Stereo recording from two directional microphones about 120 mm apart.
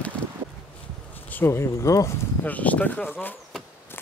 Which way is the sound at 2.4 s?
15° left (ahead or behind).